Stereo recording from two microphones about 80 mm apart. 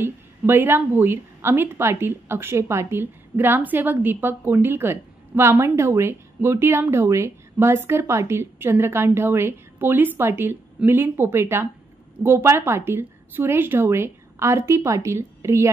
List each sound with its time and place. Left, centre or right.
0.0 s a woman's voice: right